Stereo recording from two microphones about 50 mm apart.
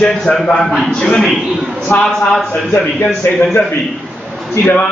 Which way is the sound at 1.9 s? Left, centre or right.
Left.